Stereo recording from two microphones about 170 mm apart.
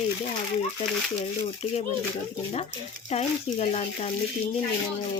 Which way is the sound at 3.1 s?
40° left (ahead or behind).